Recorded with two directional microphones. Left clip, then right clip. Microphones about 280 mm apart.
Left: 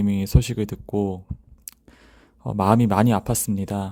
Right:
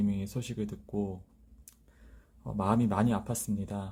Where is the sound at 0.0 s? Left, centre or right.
Left.